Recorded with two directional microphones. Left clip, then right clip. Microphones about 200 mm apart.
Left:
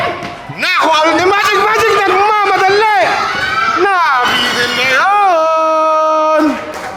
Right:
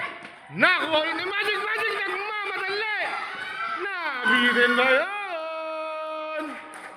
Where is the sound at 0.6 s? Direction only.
15° left (ahead or behind).